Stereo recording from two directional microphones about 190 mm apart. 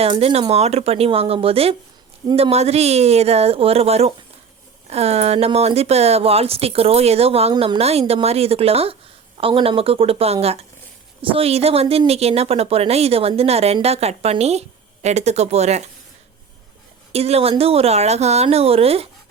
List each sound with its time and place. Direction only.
0.0 s speech: 30° right (ahead or behind)
17.1 s speech: 35° right (ahead or behind)